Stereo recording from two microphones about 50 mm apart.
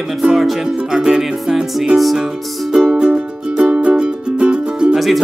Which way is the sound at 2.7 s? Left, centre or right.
Centre.